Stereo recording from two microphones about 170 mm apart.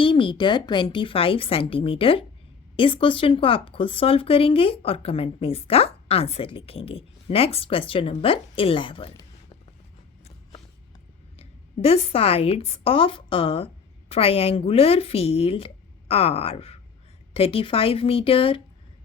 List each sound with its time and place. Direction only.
0.0 s speech: 30° left (ahead or behind)
11.3 s a woman's voice: 35° left (ahead or behind)